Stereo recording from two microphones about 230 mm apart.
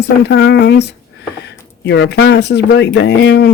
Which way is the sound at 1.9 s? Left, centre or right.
Left.